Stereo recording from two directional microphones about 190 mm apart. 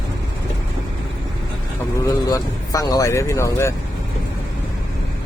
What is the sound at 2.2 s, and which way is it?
Speech, 20° left (ahead or behind).